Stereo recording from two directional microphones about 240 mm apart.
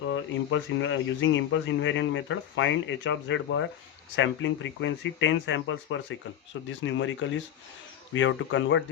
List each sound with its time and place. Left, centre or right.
0.1 s speech: left